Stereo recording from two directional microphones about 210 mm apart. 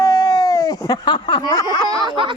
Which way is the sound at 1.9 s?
20° right (ahead or behind).